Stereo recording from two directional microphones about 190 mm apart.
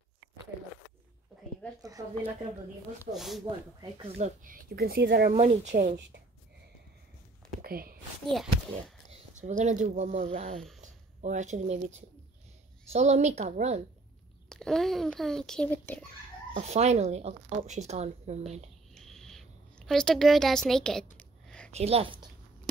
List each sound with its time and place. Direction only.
1.8 s speech: 20° right (ahead or behind)
3.1 s speech: centre (ahead or behind)
4.4 s speech: 50° right (ahead or behind)
5.3 s speech: 35° right (ahead or behind)
7.6 s a sound: 50° right (ahead or behind)
8.3 s speech: centre (ahead or behind)
9.1 s speech: 40° right (ahead or behind)
14.5 s speech: 5° left (ahead or behind)
16.5 s speech: 35° right (ahead or behind)
18.9 s a sound: centre (ahead or behind)
21.7 s speech: 30° right (ahead or behind)